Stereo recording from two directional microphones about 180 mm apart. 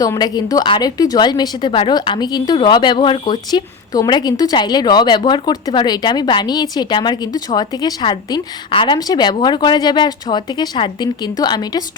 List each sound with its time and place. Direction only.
0.0 s a woman's voice: 20° left (ahead or behind)